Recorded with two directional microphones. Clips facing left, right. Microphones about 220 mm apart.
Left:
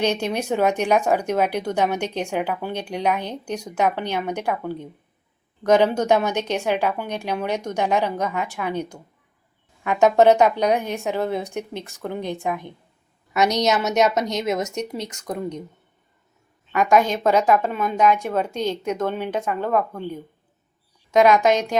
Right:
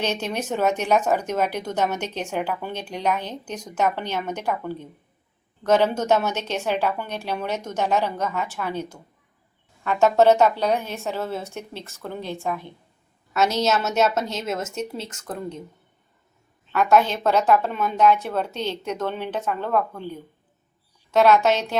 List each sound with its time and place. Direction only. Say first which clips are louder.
0.0 s speech: left 4 dB; 10° left (ahead or behind)
16.7 s speech: left 1 dB; 10° left (ahead or behind)
21.1 s speech: left 2 dB; 15° left (ahead or behind)